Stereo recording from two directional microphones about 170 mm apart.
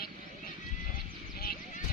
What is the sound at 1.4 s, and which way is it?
Clip-clop, 60° left (ahead or behind).